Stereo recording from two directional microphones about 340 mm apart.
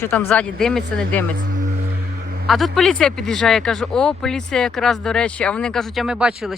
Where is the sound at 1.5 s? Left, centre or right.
Right.